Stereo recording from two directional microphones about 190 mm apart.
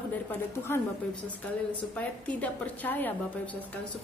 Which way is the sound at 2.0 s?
5° left (ahead or behind).